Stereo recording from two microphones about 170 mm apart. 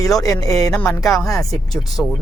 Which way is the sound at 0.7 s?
5° left (ahead or behind).